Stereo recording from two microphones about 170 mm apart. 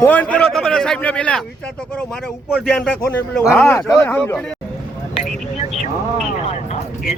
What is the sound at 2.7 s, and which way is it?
A man's voice, 5° left (ahead or behind).